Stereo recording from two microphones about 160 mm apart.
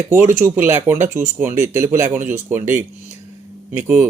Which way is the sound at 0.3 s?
15° right (ahead or behind).